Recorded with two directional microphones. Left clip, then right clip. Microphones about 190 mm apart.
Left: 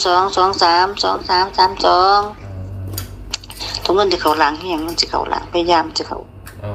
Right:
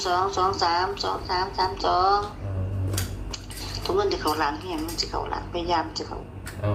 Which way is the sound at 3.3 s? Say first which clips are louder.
Left 13 dB; 50° left (ahead or behind).